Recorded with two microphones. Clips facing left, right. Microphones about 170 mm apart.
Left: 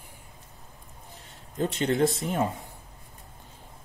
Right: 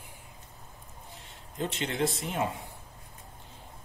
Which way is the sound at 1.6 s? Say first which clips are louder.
Left 6 dB; 40° left (ahead or behind).